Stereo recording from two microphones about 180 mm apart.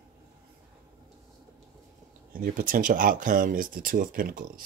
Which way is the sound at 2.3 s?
50° right (ahead or behind).